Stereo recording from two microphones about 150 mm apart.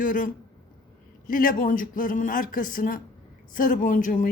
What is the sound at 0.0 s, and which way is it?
Speech, 60° left (ahead or behind).